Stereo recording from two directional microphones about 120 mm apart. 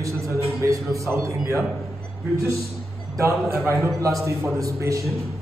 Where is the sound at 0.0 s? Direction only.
25° right (ahead or behind).